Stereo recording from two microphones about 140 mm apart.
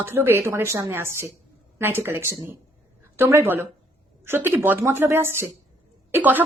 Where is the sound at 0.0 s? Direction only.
15° right (ahead or behind).